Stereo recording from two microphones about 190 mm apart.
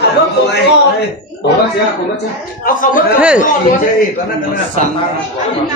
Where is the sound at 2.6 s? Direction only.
45° left (ahead or behind).